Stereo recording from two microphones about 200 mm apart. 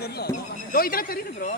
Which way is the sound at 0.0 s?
55° left (ahead or behind).